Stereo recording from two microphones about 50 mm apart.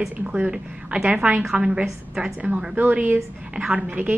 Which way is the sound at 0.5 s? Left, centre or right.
Centre.